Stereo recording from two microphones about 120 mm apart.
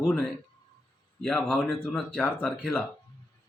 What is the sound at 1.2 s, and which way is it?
Speech, 5° left (ahead or behind).